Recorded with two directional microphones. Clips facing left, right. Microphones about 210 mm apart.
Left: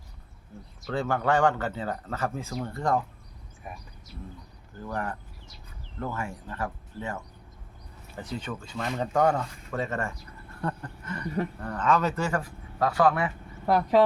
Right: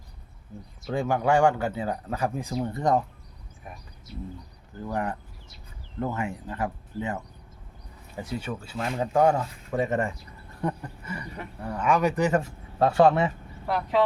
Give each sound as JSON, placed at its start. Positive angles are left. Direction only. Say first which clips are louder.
{"t": 0.9, "sound": "speech", "louder": "right 2 dB", "side_deg": -15}
{"t": 4.9, "sound": "speech", "louder": "right 3 dB", "side_deg": -20}
{"t": 10.6, "sound": "a sound", "louder": "right 3 dB", "side_deg": -15}
{"t": 11.6, "sound": "speech", "louder": "right 3 dB", "side_deg": -10}
{"t": 13.7, "sound": "speech", "louder": "left 4 dB", "side_deg": 40}